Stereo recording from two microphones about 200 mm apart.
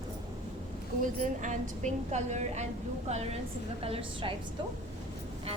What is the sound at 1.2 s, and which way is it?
A woman's voice, 40° right (ahead or behind).